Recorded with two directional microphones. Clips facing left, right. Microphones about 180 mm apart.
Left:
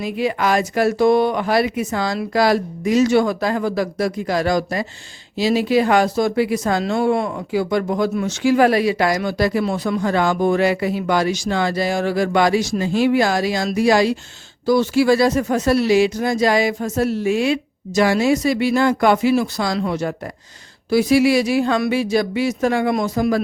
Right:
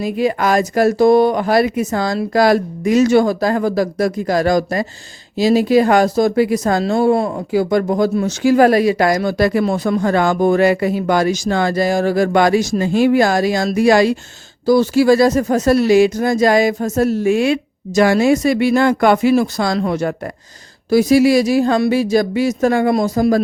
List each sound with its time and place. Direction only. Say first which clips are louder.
0.0 s speech: right 3 dB; 45° right (ahead or behind)
14.7 s speech: right 3 dB; 40° right (ahead or behind)
20.9 s speech: right 3 dB; 40° right (ahead or behind)